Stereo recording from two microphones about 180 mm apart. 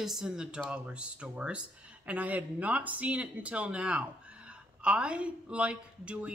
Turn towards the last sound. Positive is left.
turn(degrees=-5)  # may be behind; listen again after turning